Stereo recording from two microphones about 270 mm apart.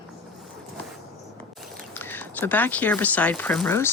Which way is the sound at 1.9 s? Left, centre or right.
Centre.